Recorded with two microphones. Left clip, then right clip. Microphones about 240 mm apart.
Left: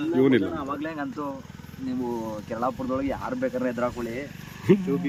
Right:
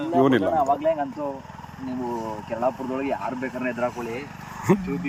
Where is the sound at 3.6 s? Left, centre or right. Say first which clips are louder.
Right 3 dB; centre.